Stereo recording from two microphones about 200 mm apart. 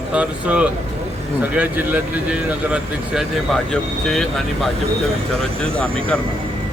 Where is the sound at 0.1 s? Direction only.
5° right (ahead or behind).